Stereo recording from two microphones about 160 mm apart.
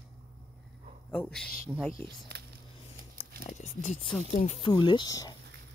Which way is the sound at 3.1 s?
50° left (ahead or behind).